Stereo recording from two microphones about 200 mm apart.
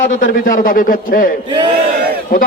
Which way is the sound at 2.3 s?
50° left (ahead or behind).